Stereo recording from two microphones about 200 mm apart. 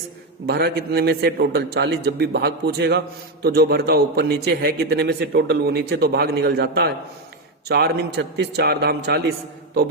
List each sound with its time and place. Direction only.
0.4 s a man's voice: 55° right (ahead or behind)